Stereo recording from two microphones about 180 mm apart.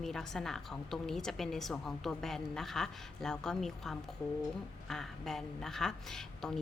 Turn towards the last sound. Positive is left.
turn(degrees=5)  # may be behind; listen again after turning